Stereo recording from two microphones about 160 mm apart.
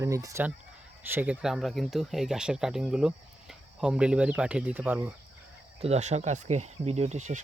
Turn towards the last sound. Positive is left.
turn(degrees=-45)  # may be behind; listen again after turning